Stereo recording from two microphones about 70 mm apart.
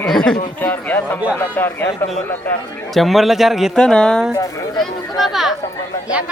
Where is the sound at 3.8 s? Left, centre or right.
Centre.